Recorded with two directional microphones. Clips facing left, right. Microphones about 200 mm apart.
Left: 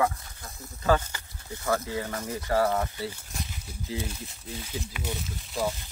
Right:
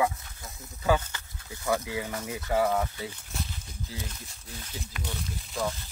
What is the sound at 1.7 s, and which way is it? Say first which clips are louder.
Speech: left 1 dB; 10° right (ahead or behind).